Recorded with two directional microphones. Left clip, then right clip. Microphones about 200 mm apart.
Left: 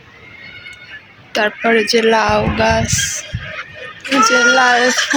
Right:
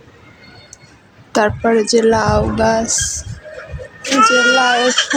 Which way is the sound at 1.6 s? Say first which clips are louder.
Left 2 dB; 20° right (ahead or behind).